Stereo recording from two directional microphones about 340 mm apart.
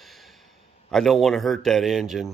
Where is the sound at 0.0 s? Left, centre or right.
Centre.